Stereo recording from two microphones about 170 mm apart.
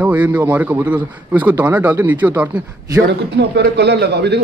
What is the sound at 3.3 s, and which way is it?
A man's voice, 85° right.